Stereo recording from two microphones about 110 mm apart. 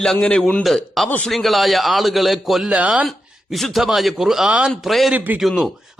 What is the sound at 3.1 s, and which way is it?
A man's voice, centre (ahead or behind).